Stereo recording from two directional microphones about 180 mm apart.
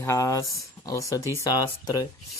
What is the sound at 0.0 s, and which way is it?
Speech, 15° left (ahead or behind).